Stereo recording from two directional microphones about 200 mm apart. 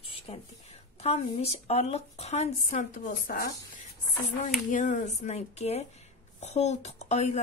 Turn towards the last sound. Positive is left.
turn(degrees=35)  # may be behind; listen again after turning